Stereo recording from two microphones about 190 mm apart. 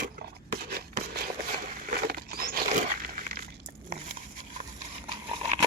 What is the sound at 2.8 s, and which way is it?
Crumpling, 45° right (ahead or behind).